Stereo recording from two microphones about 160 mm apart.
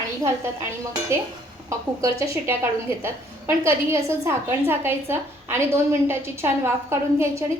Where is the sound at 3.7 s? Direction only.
15° right (ahead or behind).